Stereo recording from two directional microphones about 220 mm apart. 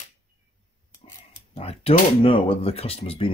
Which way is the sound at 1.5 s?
25° left (ahead or behind).